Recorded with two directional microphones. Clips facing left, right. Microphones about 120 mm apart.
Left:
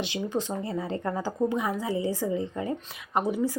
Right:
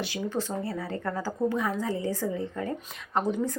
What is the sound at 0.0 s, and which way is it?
Speech, 20° left (ahead or behind).